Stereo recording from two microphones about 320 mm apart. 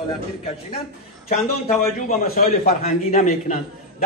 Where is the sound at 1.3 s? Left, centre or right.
Left.